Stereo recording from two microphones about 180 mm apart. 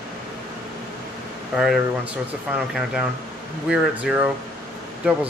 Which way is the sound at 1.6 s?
5° right (ahead or behind).